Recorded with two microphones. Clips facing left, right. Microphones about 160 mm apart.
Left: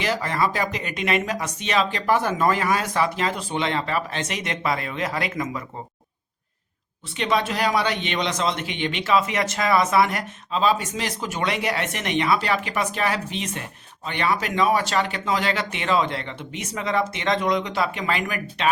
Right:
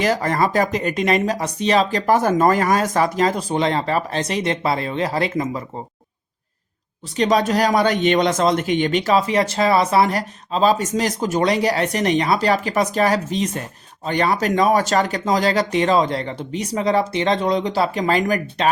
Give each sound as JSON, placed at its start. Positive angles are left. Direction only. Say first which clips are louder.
{"t": 0.0, "sound": "speech", "louder": "right 5 dB", "side_deg": -45}
{"t": 7.2, "sound": "speech", "louder": "right 6 dB", "side_deg": -40}